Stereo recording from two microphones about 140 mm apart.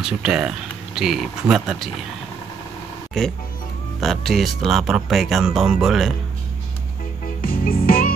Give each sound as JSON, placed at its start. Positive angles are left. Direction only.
{"t": 0.0, "sound": "speech", "side_deg": -5}
{"t": 3.2, "sound": "speech", "side_deg": 0}
{"t": 7.4, "sound": "music", "side_deg": 90}